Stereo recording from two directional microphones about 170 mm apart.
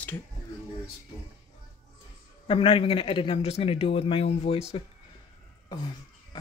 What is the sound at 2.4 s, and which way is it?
A man's voice, 30° left (ahead or behind).